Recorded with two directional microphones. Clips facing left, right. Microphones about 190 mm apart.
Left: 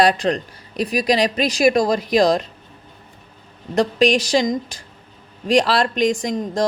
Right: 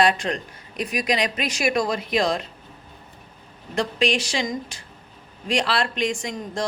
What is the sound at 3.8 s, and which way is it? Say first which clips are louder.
A woman's voice: left 6 dB; 40° left (ahead or behind).